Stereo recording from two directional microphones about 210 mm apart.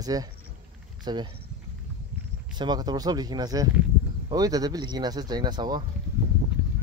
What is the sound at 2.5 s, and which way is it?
Speech, 20° right (ahead or behind).